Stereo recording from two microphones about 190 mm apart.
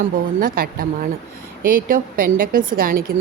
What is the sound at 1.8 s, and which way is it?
Speech, 45° right (ahead or behind).